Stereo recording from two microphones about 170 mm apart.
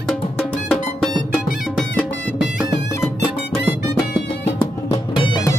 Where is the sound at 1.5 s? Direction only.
Centre (ahead or behind).